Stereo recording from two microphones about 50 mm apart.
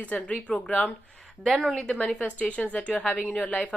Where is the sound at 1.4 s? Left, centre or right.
Centre.